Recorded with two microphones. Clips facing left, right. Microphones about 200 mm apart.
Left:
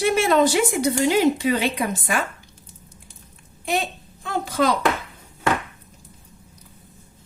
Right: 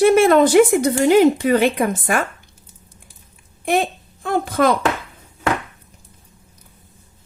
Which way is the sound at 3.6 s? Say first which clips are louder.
Right 6 dB; 55° right (ahead or behind).